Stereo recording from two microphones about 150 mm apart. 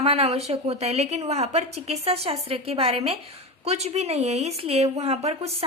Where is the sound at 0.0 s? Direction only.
45° right (ahead or behind).